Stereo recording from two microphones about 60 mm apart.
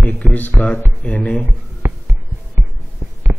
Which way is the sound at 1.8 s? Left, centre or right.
Right.